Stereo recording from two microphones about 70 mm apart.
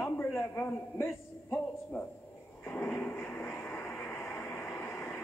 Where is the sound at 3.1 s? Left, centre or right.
Left.